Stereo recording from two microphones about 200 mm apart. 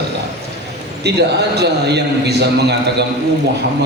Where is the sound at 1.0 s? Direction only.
55° right (ahead or behind).